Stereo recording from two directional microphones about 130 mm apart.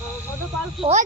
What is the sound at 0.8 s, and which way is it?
Speech, 55° right (ahead or behind).